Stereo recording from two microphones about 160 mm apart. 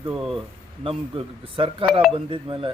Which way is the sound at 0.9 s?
30° right (ahead or behind).